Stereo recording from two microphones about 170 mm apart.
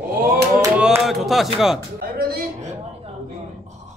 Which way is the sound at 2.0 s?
65° right (ahead or behind).